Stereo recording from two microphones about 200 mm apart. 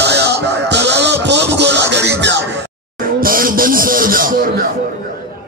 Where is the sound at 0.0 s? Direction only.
55° right (ahead or behind).